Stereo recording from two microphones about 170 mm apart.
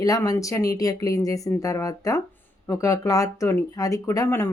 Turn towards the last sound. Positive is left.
turn(degrees=20)  # may be behind; listen again after turning